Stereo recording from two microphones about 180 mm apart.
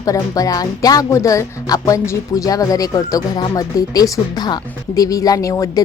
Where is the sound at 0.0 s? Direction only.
20° left (ahead or behind).